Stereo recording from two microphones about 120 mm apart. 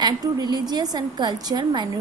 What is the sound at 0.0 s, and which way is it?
A woman's voice, 35° right (ahead or behind).